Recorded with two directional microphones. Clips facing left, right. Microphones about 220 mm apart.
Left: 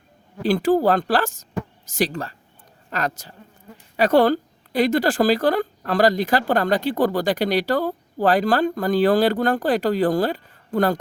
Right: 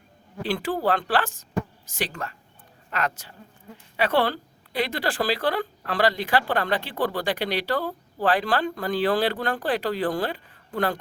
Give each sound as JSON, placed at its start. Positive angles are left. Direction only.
{"t": 0.4, "sound": "a woman's voice", "side_deg": 40}